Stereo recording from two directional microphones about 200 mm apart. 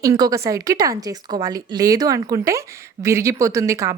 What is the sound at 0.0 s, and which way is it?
A woman's voice, 15° right (ahead or behind).